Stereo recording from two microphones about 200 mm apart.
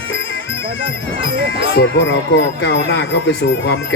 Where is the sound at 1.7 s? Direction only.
60° left (ahead or behind).